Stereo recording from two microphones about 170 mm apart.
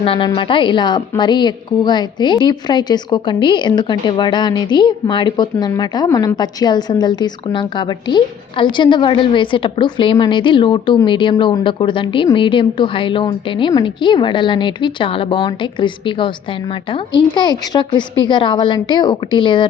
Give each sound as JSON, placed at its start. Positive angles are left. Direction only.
{"t": 0.0, "sound": "a woman's voice", "side_deg": 35}